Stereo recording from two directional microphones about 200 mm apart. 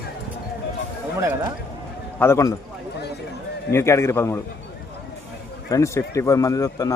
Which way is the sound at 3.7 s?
15° left (ahead or behind).